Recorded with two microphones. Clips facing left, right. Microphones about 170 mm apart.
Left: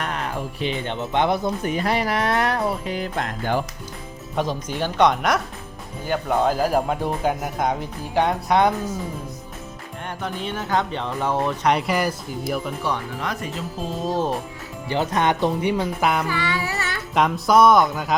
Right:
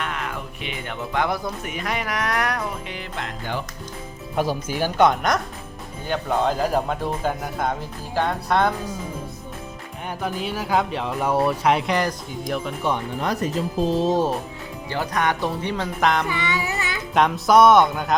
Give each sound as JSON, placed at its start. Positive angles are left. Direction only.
{"t": 0.0, "sound": "speech", "side_deg": 35}
{"t": 1.6, "sound": "speech", "side_deg": 35}
{"t": 4.4, "sound": "speech", "side_deg": -5}
{"t": 10.2, "sound": "speech", "side_deg": -5}
{"t": 13.1, "sound": "speech", "side_deg": -35}
{"t": 14.8, "sound": "speech", "side_deg": 20}
{"t": 15.7, "sound": "speech", "side_deg": 5}
{"t": 16.3, "sound": "music", "side_deg": -20}
{"t": 17.2, "sound": "speech", "side_deg": 0}